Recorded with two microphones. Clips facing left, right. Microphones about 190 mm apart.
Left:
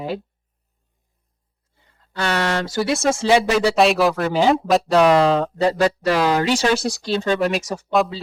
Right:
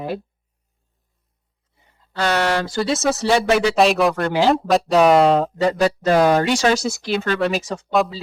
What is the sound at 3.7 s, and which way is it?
Speech, centre (ahead or behind).